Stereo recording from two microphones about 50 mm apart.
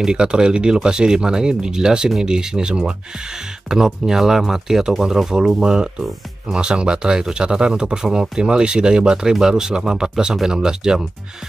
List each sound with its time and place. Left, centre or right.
0.0 s speech: centre